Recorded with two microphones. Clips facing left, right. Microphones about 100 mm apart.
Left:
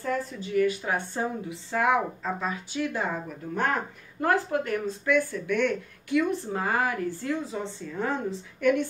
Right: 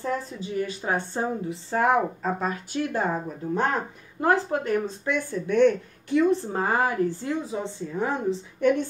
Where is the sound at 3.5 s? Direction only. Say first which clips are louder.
Right 1 dB; 25° right (ahead or behind).